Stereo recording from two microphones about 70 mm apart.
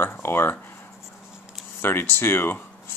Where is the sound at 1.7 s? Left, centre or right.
Left.